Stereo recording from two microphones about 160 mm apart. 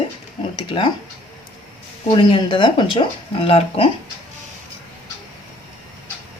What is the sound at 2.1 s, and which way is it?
Speech, 30° left (ahead or behind).